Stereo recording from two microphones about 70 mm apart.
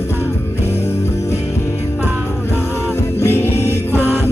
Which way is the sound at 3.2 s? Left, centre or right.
Left.